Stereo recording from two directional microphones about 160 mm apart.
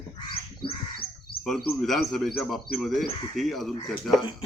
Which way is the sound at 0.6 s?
30° left (ahead or behind).